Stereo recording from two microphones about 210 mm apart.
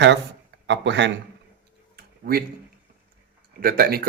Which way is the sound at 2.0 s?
50° right (ahead or behind).